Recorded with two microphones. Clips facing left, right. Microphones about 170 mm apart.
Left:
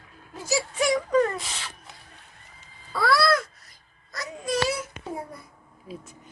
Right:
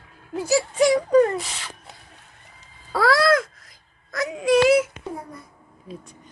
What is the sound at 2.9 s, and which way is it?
Babbling, 90° right.